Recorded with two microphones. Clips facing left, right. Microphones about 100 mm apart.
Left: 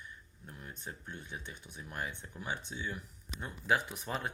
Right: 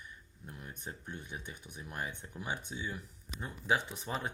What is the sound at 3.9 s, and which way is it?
Speech, centre (ahead or behind).